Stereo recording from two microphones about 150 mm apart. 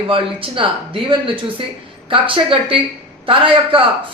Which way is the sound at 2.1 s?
35° right (ahead or behind).